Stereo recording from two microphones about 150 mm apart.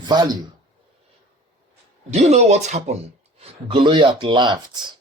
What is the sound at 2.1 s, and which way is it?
Speech, 45° right (ahead or behind).